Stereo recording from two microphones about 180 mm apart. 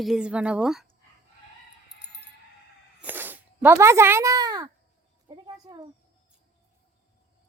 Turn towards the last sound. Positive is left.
turn(degrees=-25)  # may be behind; listen again after turning